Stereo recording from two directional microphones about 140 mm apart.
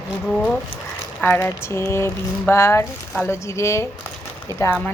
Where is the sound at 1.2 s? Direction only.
10° left (ahead or behind).